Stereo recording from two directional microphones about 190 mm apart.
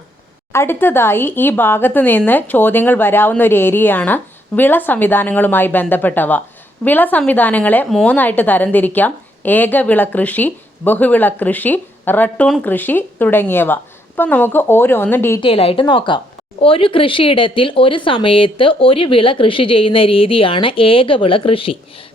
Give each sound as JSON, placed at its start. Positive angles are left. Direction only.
{"t": 0.5, "sound": "a woman's voice", "side_deg": 15}
{"t": 15.4, "sound": "speech", "side_deg": 30}